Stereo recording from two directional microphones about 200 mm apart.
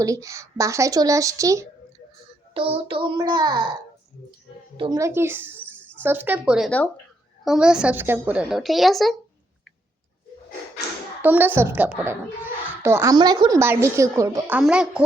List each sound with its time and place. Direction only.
0.0 s a child's voice: 15° right (ahead or behind)
2.6 s child singing: 25° right (ahead or behind)
4.8 s a child's voice: 15° right (ahead or behind); by 9.1 s centre (ahead or behind)
11.2 s a child's voice: 10° right (ahead or behind)